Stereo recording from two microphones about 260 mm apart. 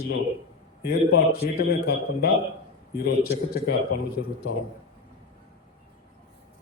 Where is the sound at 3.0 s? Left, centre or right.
Left.